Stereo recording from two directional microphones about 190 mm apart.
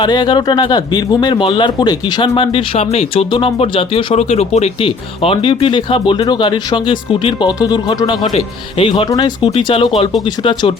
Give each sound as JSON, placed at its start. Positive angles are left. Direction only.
{"t": 0.0, "sound": "speech", "side_deg": 25}